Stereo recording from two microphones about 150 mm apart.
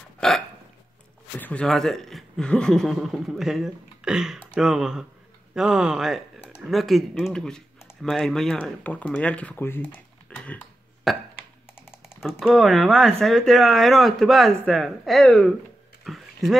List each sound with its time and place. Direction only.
0.2 s speech: 5° left (ahead or behind)
1.4 s speech: 10° left (ahead or behind)
11.8 s typing: 15° left (ahead or behind)
12.2 s speech: 5° right (ahead or behind)
16.0 s a sound: centre (ahead or behind)